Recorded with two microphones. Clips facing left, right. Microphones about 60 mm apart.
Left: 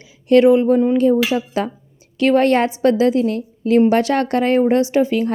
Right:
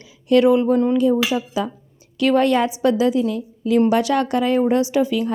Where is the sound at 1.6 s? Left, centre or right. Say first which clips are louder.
Left 2 dB; left.